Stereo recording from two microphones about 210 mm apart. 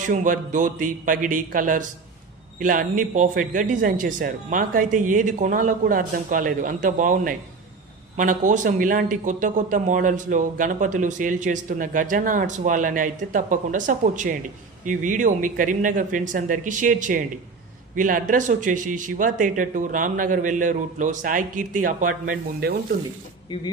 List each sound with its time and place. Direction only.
0.0 s speech: 40° right (ahead or behind)